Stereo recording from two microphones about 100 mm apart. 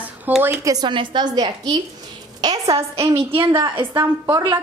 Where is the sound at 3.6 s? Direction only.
55° right (ahead or behind).